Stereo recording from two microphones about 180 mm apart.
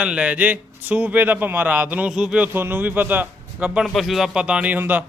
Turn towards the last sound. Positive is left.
turn(degrees=-10)  # may be behind; listen again after turning